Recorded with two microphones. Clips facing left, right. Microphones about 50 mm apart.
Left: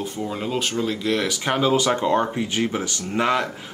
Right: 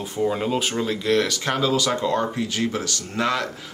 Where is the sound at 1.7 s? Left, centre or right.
Left.